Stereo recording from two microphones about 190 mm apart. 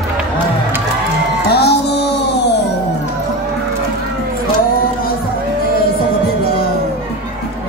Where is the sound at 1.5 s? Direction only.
60° left (ahead or behind).